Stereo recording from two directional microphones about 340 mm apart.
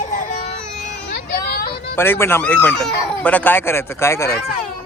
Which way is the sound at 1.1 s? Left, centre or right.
Left.